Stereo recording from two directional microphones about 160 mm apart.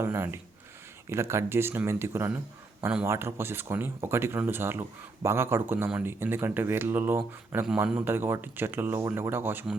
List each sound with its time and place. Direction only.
0.0 s speech: 15° right (ahead or behind)